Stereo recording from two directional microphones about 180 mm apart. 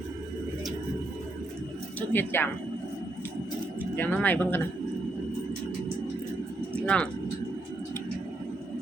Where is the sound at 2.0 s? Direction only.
10° left (ahead or behind).